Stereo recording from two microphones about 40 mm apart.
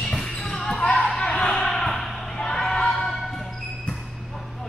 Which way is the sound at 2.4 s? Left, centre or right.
Centre.